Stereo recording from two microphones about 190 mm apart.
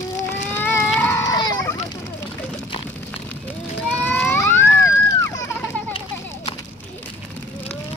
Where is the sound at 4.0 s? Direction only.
10° left (ahead or behind).